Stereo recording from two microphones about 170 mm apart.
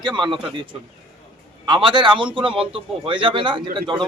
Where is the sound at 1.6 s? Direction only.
30° right (ahead or behind).